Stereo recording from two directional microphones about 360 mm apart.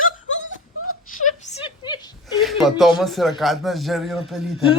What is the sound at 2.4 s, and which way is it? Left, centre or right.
Speech, centre.